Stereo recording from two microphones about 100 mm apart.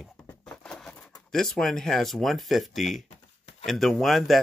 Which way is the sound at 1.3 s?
5° left (ahead or behind).